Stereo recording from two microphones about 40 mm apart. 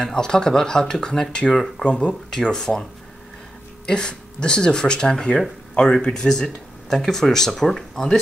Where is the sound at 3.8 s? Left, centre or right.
Left.